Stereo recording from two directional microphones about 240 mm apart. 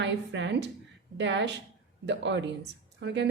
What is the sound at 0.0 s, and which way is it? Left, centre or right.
A woman's voice, right.